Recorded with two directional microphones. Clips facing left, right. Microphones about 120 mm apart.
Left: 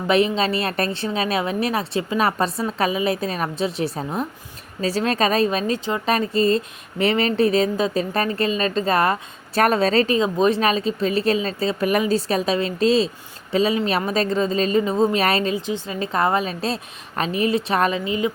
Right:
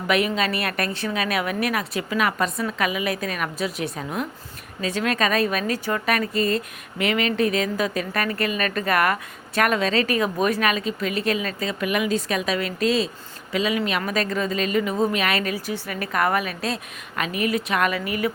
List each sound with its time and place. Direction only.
0.1 s a woman's voice: 30° left (ahead or behind)